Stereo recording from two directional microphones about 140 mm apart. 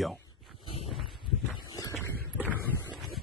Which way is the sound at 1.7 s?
25° left (ahead or behind).